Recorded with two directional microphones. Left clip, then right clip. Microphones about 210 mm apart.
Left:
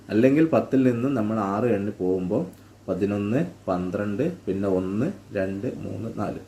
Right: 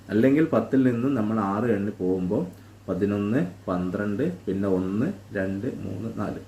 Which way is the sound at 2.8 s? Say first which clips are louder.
Even; 10° left (ahead or behind).